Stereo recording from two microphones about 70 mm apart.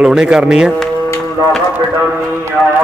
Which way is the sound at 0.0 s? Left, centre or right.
Centre.